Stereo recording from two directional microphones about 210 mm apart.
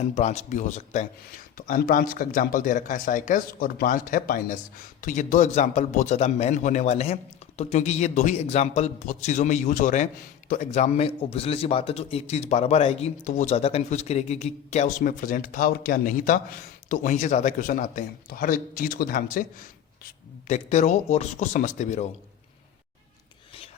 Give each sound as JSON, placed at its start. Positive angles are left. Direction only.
{"t": 0.1, "sound": "speech", "side_deg": 30}